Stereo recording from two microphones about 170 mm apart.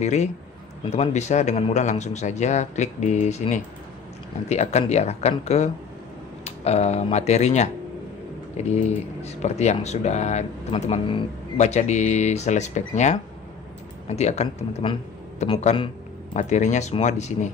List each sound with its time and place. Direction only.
0.0 s speech: 40° left (ahead or behind)
16.3 s speech: 45° left (ahead or behind)